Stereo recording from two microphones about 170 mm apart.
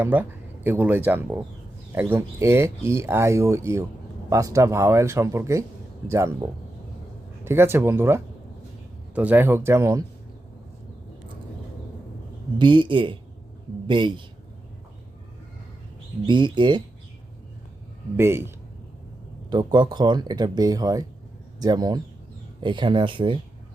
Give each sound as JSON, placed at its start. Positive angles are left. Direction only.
{"t": 0.0, "sound": "speech", "side_deg": -10}
{"t": 7.4, "sound": "speech", "side_deg": -15}
{"t": 12.5, "sound": "speech", "side_deg": -30}
{"t": 16.2, "sound": "speech", "side_deg": -25}
{"t": 18.2, "sound": "speech", "side_deg": -15}
{"t": 19.5, "sound": "speech", "side_deg": -25}